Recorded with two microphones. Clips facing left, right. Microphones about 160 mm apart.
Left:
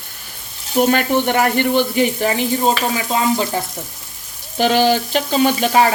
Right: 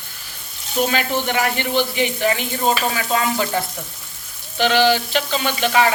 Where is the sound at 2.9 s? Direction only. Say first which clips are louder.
Left 3 dB; 20° left (ahead or behind).